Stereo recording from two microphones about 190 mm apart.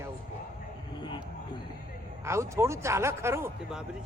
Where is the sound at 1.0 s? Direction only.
25° left (ahead or behind).